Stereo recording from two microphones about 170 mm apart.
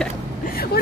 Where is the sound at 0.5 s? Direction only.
65° left (ahead or behind).